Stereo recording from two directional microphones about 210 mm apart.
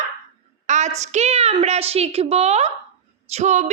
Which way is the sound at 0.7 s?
35° right (ahead or behind).